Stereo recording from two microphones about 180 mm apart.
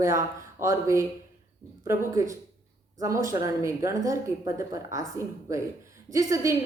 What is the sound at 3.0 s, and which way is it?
A woman's voice, 15° right (ahead or behind).